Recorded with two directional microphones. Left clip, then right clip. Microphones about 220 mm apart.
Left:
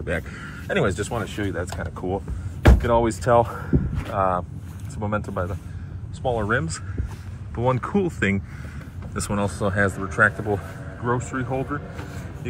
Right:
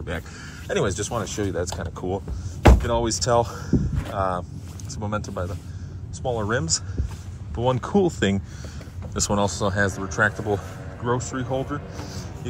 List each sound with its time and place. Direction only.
0.0 s speech: 5° right (ahead or behind)
1.1 s speech: 15° right (ahead or behind)
2.6 s speech: 5° right (ahead or behind)
10.1 s speech: 15° right (ahead or behind)